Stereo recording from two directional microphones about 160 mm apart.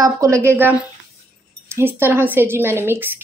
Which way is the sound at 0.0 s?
20° right (ahead or behind).